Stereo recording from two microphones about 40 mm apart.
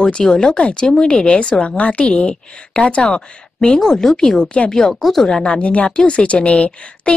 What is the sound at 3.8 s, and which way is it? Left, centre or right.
Speech, centre.